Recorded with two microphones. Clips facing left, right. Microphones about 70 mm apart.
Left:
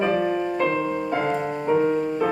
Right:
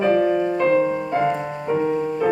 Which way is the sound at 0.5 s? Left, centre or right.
Right.